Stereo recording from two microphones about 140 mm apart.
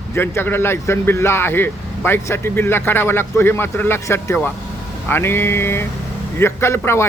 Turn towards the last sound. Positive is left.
turn(degrees=20)  # may be behind; listen again after turning